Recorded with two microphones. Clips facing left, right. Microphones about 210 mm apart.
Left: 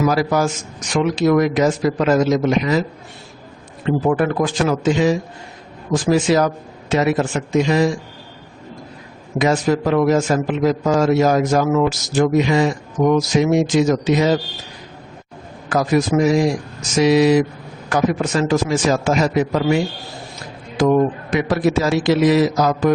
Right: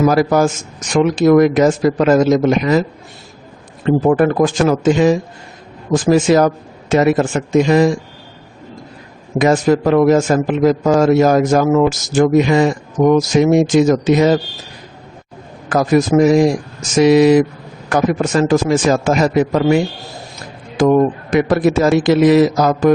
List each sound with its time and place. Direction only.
0.0 s a man's voice: 50° right (ahead or behind)
3.8 s a man's voice: 45° right (ahead or behind)
9.4 s a man's voice: 50° right (ahead or behind)
15.7 s a man's voice: 50° right (ahead or behind)